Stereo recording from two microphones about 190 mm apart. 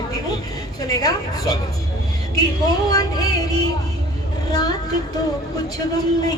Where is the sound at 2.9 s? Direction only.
20° left (ahead or behind).